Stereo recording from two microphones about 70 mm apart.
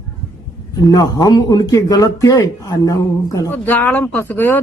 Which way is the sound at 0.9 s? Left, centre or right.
Left.